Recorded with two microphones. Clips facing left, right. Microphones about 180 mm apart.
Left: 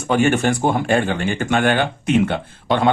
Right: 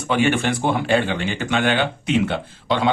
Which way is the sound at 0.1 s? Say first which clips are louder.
Left 3 dB; 45° left (ahead or behind).